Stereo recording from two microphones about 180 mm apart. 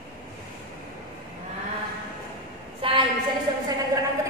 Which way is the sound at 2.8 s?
30° right (ahead or behind).